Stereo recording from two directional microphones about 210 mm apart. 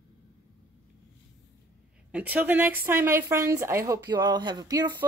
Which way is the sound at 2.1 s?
5° right (ahead or behind).